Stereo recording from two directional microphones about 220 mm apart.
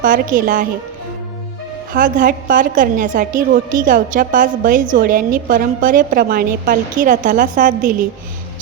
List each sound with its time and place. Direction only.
0.0 s a woman's voice: 40° right (ahead or behind)
1.9 s a woman's voice: 35° right (ahead or behind)